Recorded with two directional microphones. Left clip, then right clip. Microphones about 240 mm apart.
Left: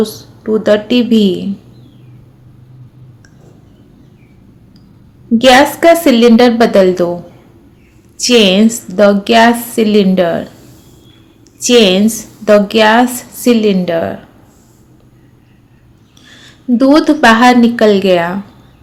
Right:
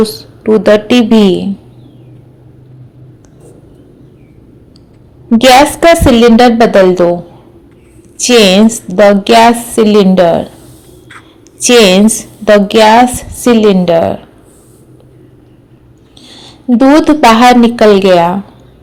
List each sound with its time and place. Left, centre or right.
0.0 s speech: right
5.4 s a woman's voice: centre
8.2 s a woman's voice: centre
11.6 s a woman's voice: right
16.2 s speech: centre